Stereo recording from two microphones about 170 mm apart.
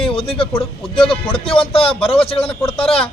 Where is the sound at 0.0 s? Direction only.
30° left (ahead or behind).